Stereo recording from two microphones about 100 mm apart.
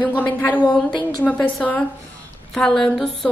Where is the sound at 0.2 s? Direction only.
15° left (ahead or behind).